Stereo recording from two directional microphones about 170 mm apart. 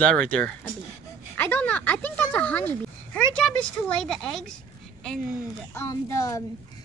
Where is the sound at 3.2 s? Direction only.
5° left (ahead or behind).